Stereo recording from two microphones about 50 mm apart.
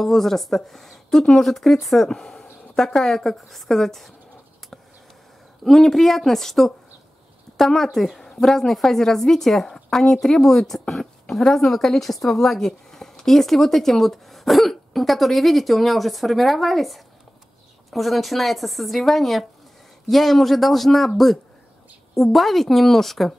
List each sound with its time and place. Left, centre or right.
0.0 s a woman's voice: centre
5.6 s a woman's voice: centre
22.1 s speech: centre